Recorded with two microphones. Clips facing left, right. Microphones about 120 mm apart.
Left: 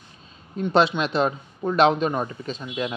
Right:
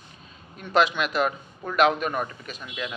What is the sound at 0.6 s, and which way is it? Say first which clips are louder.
Speech: left 3 dB; 30° left (ahead or behind).